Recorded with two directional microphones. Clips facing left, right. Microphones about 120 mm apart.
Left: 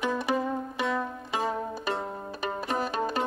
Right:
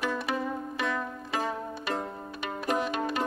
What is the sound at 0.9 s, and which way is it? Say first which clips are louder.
Music: left 2 dB; centre (ahead or behind).